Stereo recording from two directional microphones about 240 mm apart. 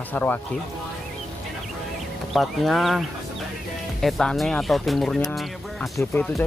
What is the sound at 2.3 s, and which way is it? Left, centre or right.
Speech, centre.